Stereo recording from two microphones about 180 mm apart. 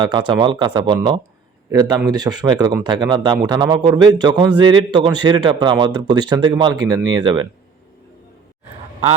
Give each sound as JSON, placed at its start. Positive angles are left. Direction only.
{"t": 0.0, "sound": "a man's voice", "side_deg": -25}